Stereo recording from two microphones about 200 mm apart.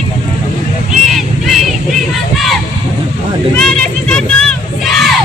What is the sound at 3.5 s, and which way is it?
Crowd, 5° left (ahead or behind).